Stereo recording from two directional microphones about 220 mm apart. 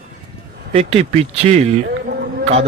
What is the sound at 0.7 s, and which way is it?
Speech, 30° right (ahead or behind).